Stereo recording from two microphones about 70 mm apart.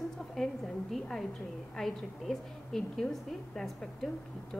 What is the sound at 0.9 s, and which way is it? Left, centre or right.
A woman's voice, centre.